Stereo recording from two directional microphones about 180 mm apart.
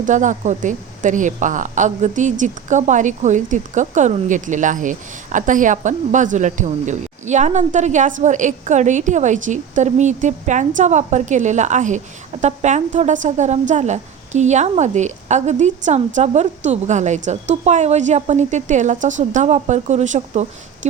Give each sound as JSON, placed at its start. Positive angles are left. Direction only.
{"t": 0.0, "sound": "a woman's voice", "side_deg": -45}